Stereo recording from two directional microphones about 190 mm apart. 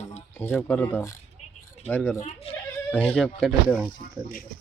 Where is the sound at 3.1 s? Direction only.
5° left (ahead or behind).